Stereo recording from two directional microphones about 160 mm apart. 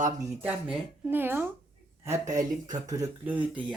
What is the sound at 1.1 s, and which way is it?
Speech, 10° right (ahead or behind).